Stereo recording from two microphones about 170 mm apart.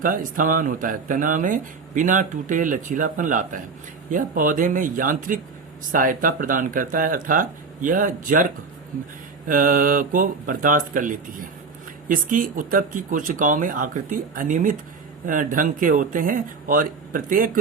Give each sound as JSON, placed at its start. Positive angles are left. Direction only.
{"t": 0.0, "sound": "speech", "side_deg": -55}
{"t": 9.5, "sound": "speech", "side_deg": -55}